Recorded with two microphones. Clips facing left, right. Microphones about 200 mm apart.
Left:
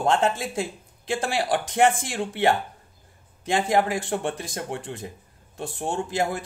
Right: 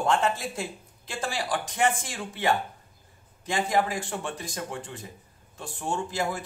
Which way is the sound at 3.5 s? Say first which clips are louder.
Left 4 dB; 60° left (ahead or behind).